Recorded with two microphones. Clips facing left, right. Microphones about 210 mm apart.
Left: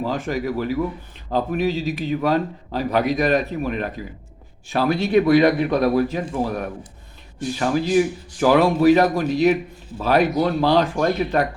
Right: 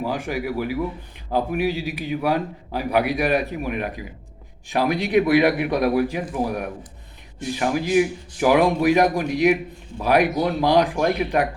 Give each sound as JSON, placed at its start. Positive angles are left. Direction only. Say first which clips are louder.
{"t": 0.0, "sound": "a man's voice", "louder": "left 2 dB", "side_deg": -15}